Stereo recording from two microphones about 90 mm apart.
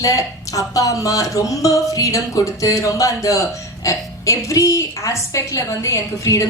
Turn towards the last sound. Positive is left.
turn(degrees=35)  # may be behind; listen again after turning